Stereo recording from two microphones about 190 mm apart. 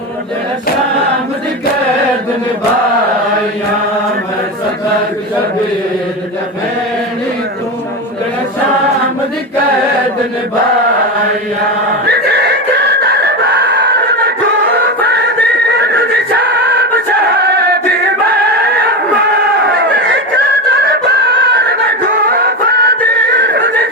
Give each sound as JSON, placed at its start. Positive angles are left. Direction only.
{"t": 12.0, "sound": "snicker", "side_deg": -60}
{"t": 15.0, "sound": "music", "side_deg": -60}
{"t": 15.8, "sound": "neigh", "side_deg": -60}
{"t": 17.4, "sound": "chant", "side_deg": -60}
{"t": 19.3, "sound": "chatter", "side_deg": -65}
{"t": 20.8, "sound": "music", "side_deg": -60}
{"t": 23.3, "sound": "a sound", "side_deg": -60}